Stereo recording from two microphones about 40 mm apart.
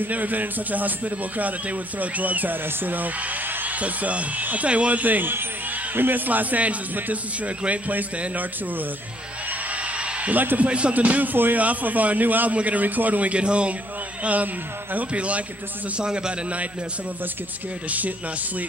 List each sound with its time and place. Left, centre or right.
0.0 s speech: right
3.6 s a man's voice: right
5.0 s a man's voice: right
9.5 s a sound: right
10.3 s speech: right
10.6 s a man's voice: right
14.2 s speech: right
15.1 s a man's voice: right
16.0 s a man's voice: right
17.8 s a man's voice: right